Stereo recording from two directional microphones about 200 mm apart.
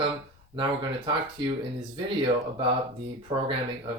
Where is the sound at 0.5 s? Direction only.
25° right (ahead or behind).